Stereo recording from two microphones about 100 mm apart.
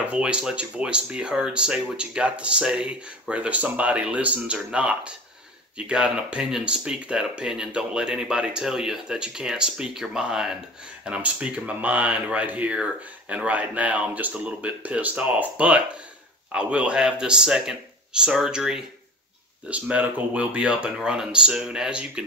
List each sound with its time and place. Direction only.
0.1 s speech: 10° right (ahead or behind)